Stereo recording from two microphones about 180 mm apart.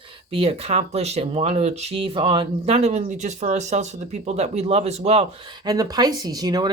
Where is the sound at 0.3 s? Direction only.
30° right (ahead or behind).